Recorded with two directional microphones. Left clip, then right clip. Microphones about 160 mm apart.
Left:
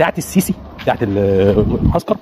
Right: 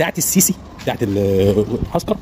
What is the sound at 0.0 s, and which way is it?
Speech, 15° right (ahead or behind).